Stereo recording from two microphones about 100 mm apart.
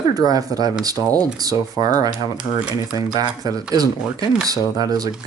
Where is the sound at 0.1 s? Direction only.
40° right (ahead or behind).